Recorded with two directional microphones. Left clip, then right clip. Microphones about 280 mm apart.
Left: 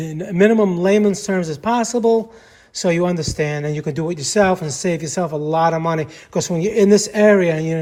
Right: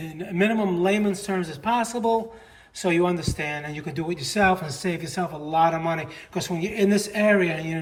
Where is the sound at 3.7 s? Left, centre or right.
Centre.